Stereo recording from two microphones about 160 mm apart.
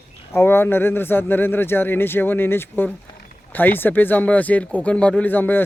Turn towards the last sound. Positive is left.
turn(degrees=10)  # may be behind; listen again after turning